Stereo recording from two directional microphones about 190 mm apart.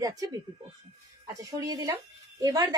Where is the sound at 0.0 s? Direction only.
20° right (ahead or behind).